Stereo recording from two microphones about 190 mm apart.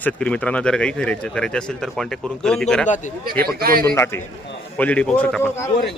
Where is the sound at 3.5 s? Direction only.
50° right (ahead or behind).